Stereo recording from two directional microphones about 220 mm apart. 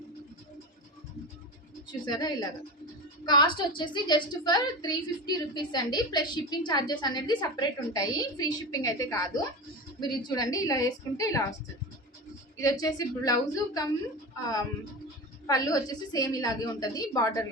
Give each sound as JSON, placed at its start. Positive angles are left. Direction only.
{"t": 2.0, "sound": "a woman's voice", "side_deg": 20}
{"t": 12.5, "sound": "a woman's voice", "side_deg": 15}
{"t": 15.4, "sound": "a woman's voice", "side_deg": 15}